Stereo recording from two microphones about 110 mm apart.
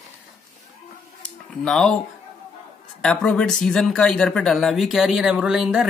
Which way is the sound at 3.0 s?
5° left (ahead or behind).